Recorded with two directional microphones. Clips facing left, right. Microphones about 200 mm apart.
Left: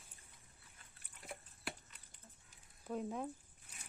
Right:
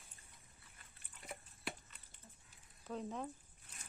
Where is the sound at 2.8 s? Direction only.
10° left (ahead or behind).